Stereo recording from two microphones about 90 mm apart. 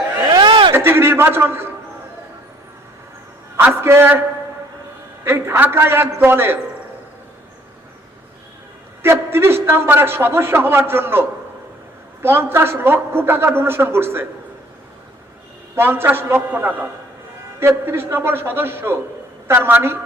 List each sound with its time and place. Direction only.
0.3 s a sound: 55° right (ahead or behind)
0.7 s a man's voice: 25° right (ahead or behind)
3.8 s a man's voice: 25° right (ahead or behind)
5.2 s a man's voice: 25° right (ahead or behind)
9.0 s a man's voice: 25° right (ahead or behind)
15.7 s a man's voice: 25° right (ahead or behind)